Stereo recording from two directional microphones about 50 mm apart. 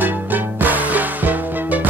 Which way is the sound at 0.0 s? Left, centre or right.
Right.